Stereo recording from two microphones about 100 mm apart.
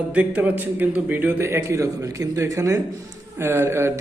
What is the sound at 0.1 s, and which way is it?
A man's voice, 15° right (ahead or behind).